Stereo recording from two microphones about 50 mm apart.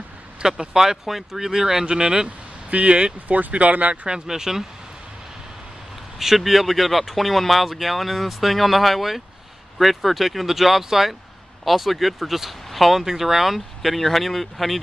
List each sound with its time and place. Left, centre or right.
0.4 s speech: centre
2.2 s speech: right
4.3 s speech: centre
6.1 s speech: centre